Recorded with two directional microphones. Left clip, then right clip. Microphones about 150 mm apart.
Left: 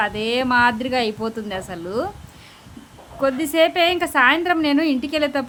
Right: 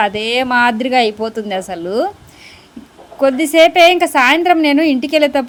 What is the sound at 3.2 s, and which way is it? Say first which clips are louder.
A woman's voice: right 8 dB; 25° right (ahead or behind).